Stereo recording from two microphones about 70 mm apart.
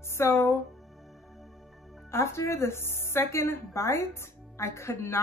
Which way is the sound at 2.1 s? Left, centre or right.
Left.